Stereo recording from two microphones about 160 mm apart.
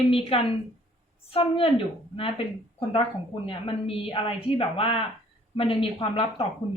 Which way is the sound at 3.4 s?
35° left (ahead or behind).